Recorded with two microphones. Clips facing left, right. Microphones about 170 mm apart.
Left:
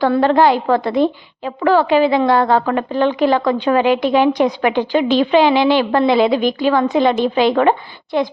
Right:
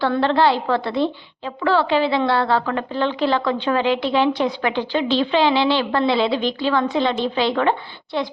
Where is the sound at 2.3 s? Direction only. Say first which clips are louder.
Left 5 dB; 50° left (ahead or behind).